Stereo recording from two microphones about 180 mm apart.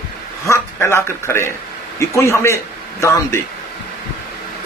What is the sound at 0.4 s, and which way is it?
A man's voice, 15° left (ahead or behind).